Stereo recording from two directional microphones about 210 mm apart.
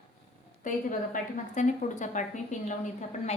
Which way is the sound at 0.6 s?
40° left (ahead or behind).